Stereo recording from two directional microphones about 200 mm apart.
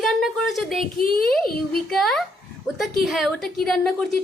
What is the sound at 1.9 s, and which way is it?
Speech, centre (ahead or behind).